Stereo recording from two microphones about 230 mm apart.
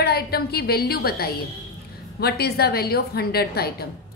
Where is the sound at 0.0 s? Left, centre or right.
Left.